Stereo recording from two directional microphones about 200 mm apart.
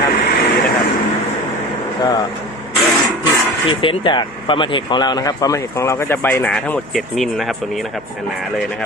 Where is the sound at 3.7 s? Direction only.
25° left (ahead or behind); by 7.9 s centre (ahead or behind).